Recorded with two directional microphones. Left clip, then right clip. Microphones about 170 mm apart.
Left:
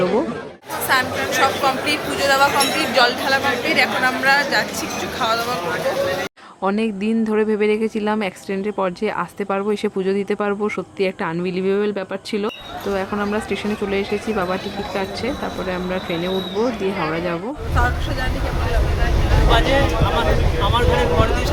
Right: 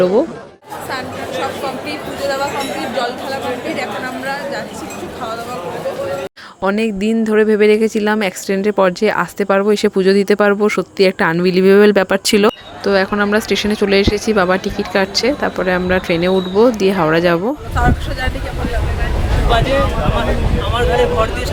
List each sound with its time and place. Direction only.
0.9 s a woman's voice: centre (ahead or behind)
6.6 s a woman's voice: 10° right (ahead or behind); by 12.5 s 40° right (ahead or behind)
12.8 s a woman's voice: 25° right (ahead or behind)
19.5 s a woman's voice: centre (ahead or behind)